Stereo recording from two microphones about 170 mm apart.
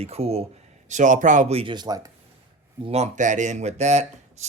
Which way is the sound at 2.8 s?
40° right (ahead or behind).